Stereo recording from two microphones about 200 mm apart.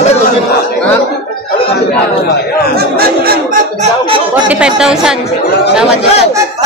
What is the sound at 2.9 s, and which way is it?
Speech, 50° right (ahead or behind).